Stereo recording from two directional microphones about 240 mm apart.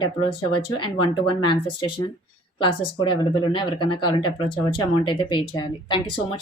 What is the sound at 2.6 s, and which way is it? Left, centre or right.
Speech, left.